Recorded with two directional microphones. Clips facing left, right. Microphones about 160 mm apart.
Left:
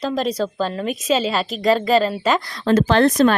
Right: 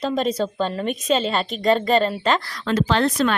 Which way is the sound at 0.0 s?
Centre (ahead or behind).